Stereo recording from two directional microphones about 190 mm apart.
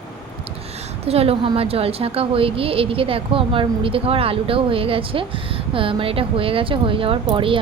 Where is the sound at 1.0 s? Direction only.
30° right (ahead or behind).